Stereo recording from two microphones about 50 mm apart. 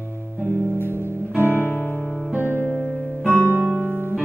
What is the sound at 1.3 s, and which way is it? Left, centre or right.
Music, right.